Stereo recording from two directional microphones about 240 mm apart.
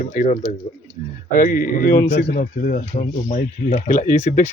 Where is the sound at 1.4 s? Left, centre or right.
Left.